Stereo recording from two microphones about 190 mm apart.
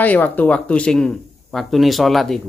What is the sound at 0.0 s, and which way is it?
Speech, 10° left (ahead or behind).